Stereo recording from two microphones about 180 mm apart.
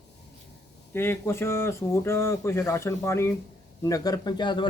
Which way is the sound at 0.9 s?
15° left (ahead or behind).